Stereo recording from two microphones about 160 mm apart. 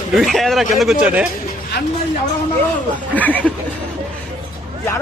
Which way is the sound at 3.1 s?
10° left (ahead or behind).